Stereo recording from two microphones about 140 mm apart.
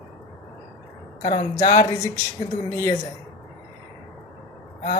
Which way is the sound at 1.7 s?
25° left (ahead or behind).